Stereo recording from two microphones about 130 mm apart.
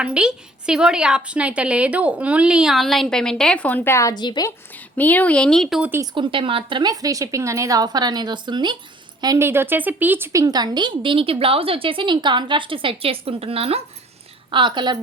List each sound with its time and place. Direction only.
0.0 s a woman's voice: 10° right (ahead or behind); by 4.1 s 20° left (ahead or behind)
4.1 s a woman's voice: 35° left (ahead or behind)
4.4 s a woman's voice: 15° left (ahead or behind); by 5.9 s centre (ahead or behind)
6.1 s speech: 40° right (ahead or behind)
9.4 s speech: 20° right (ahead or behind); by 13.8 s 50° right (ahead or behind)
14.5 s speech: 35° right (ahead or behind)